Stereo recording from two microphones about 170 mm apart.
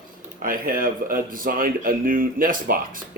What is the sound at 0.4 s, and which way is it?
Speech, 55° right (ahead or behind).